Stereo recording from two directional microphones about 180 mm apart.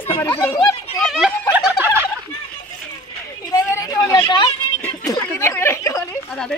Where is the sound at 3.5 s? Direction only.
20° left (ahead or behind).